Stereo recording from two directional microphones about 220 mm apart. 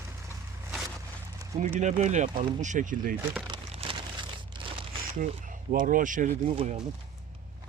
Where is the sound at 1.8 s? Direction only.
35° right (ahead or behind).